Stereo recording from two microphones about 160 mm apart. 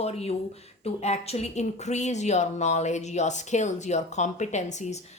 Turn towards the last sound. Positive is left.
turn(degrees=45)  # may be behind; listen again after turning